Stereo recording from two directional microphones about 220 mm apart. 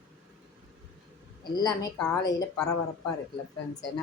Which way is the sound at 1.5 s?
15° left (ahead or behind).